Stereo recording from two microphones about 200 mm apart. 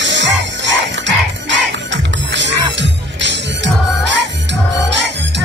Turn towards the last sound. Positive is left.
turn(degrees=-60)  # may be behind; listen again after turning